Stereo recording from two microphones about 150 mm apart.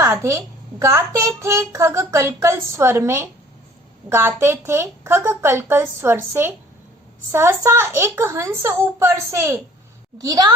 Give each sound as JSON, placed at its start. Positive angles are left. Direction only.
{"t": 0.0, "sound": "a child's voice", "side_deg": -20}